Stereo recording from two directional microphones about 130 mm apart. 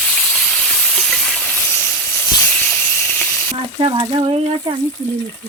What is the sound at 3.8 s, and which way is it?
Water, 40° right (ahead or behind).